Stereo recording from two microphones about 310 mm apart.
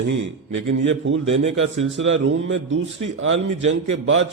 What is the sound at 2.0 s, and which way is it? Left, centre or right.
Speech, right.